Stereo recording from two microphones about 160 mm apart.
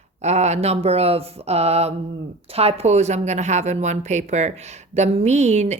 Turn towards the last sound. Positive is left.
turn(degrees=-45)  # may be behind; listen again after turning